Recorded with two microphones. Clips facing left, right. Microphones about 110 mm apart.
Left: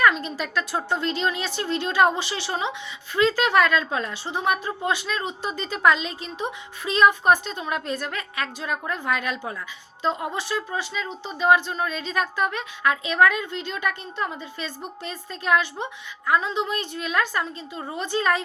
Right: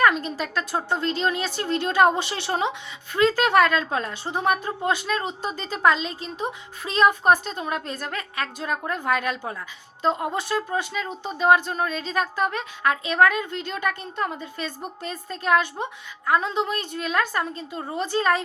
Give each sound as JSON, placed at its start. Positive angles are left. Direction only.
{"t": 0.0, "sound": "a woman's voice", "side_deg": -40}